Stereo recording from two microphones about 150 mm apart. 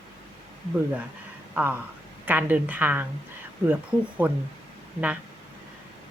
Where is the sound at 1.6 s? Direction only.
10° right (ahead or behind).